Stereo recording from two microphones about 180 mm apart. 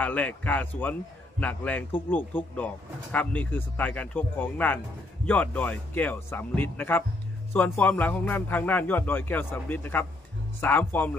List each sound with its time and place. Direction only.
0.0 s a man's voice: 10° left (ahead or behind)